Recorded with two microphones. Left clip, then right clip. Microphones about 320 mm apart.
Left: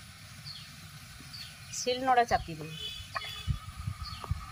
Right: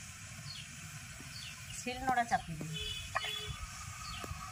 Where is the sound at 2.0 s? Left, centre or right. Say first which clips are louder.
Left 6 dB; left.